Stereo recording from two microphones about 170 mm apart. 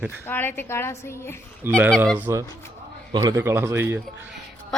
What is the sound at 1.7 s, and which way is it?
Speech, 15° right (ahead or behind).